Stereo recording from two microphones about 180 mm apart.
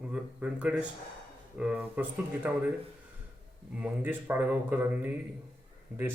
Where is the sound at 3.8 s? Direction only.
10° right (ahead or behind).